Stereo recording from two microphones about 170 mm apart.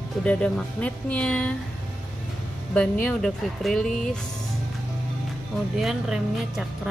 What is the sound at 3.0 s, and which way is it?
Speech, 5° left (ahead or behind).